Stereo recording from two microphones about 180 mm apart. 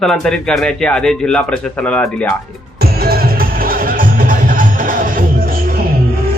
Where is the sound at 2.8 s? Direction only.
60° right (ahead or behind).